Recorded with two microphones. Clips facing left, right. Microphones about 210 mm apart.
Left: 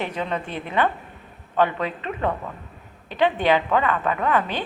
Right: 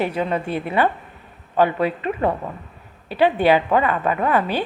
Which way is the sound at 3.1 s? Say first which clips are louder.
Right 4 dB; 10° right (ahead or behind).